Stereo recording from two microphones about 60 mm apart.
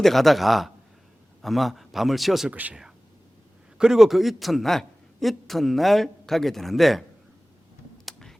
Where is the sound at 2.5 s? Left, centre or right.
Right.